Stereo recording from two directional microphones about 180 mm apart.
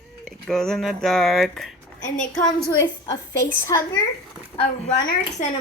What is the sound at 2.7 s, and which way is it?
A woman's voice, 20° left (ahead or behind).